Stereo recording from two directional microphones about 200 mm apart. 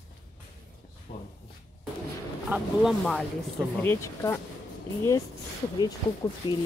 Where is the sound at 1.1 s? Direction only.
45° left (ahead or behind).